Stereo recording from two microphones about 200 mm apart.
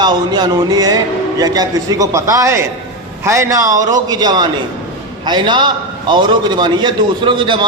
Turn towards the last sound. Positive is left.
turn(degrees=-25)  # may be behind; listen again after turning